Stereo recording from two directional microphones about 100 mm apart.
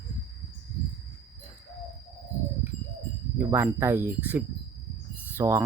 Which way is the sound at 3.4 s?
25° right (ahead or behind).